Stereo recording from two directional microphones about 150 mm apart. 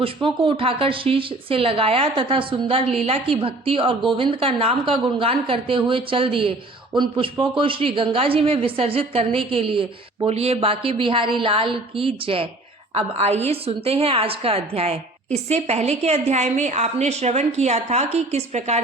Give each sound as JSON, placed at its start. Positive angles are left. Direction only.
{"t": 0.0, "sound": "a woman's voice", "side_deg": -35}